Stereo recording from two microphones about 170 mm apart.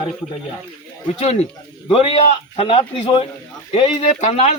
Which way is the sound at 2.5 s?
35° left (ahead or behind).